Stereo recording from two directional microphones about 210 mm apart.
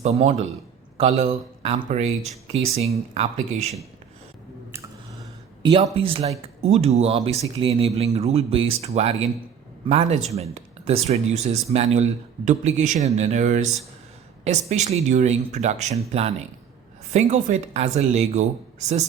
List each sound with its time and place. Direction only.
0.0 s speech: 30° right (ahead or behind)
5.6 s speech: 25° right (ahead or behind)